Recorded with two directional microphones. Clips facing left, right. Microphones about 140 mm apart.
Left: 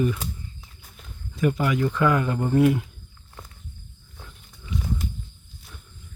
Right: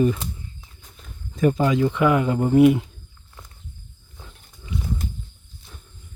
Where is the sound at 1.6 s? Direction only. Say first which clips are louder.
Right 2 dB; 20° right (ahead or behind).